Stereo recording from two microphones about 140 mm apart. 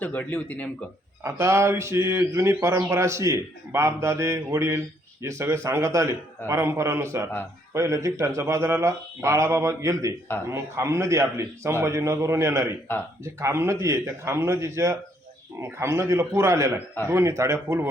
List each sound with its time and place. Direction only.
0.0 s speech: 10° left (ahead or behind)
1.2 s speech: 20° right (ahead or behind)